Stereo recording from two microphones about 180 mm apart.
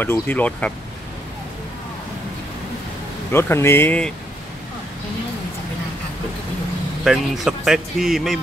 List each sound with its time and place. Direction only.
0.0 s speech: 10° left (ahead or behind)
3.3 s speech: 15° left (ahead or behind)
7.1 s speech: centre (ahead or behind)